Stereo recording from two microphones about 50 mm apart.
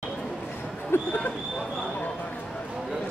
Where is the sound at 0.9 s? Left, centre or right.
Left.